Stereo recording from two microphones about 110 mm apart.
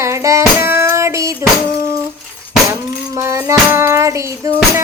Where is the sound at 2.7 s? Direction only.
25° right (ahead or behind).